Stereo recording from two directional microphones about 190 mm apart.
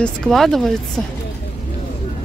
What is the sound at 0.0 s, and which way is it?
A woman's voice, centre (ahead or behind).